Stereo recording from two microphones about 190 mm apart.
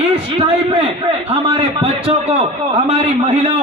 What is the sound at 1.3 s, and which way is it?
A man's voice, 30° right (ahead or behind).